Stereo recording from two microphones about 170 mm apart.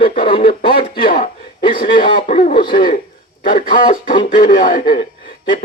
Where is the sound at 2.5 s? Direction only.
30° left (ahead or behind).